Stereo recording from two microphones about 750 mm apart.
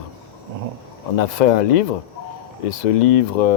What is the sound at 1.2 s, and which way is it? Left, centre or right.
Speech, left.